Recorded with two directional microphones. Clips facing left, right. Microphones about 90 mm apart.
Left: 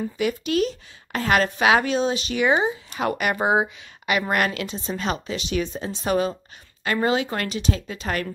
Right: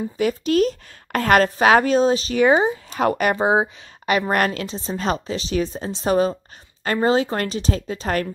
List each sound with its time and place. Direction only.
0.2 s a woman's voice: 40° right (ahead or behind)
3.3 s speech: 25° right (ahead or behind)
4.3 s a woman's voice: 40° right (ahead or behind)